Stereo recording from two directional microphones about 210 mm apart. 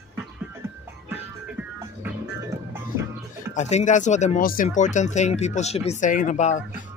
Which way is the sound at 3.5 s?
35° left (ahead or behind).